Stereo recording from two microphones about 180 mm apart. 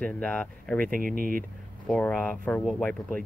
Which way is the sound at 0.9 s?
50° right (ahead or behind).